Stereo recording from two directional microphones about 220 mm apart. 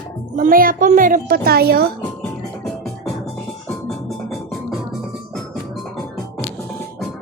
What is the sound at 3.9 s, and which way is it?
Music, centre (ahead or behind).